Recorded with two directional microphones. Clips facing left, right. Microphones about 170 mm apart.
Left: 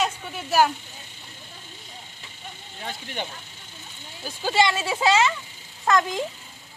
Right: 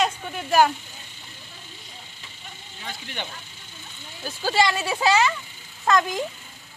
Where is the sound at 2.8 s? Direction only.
45° left (ahead or behind).